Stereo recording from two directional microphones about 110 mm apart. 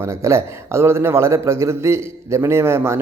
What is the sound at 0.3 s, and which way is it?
A man's voice, 25° right (ahead or behind).